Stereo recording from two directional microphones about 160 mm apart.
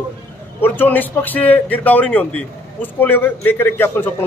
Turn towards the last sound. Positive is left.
turn(degrees=15)  # may be behind; listen again after turning